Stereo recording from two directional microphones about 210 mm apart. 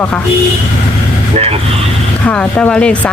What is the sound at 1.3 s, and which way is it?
Vehicle, 30° right (ahead or behind).